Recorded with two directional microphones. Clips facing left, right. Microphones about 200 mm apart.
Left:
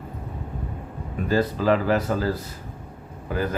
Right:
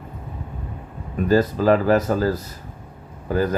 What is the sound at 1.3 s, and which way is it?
Speech, 45° right (ahead or behind).